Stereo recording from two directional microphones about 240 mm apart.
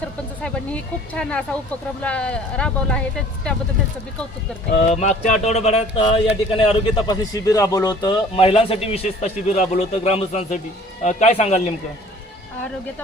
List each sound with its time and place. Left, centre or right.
0.4 s speech: centre
4.9 s speech: left